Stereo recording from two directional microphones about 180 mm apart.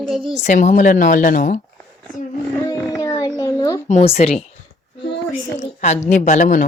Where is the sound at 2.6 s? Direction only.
20° left (ahead or behind).